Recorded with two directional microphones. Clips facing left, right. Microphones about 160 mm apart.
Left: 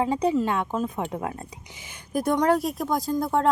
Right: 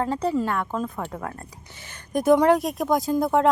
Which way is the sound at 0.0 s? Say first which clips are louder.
Left 1 dB; 15° left (ahead or behind).